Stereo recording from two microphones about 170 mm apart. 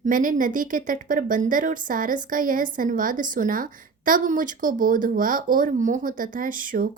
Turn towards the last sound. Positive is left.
turn(degrees=-55)  # may be behind; listen again after turning